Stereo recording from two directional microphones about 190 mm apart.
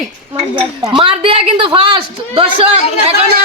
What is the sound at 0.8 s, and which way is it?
A woman's voice, 25° right (ahead or behind).